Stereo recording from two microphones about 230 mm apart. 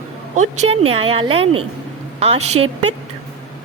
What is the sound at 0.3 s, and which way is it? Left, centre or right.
A woman's voice, right.